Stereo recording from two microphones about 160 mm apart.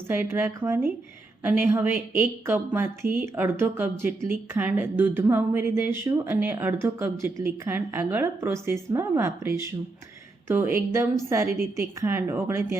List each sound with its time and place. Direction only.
0.1 s a woman's voice: 15° right (ahead or behind)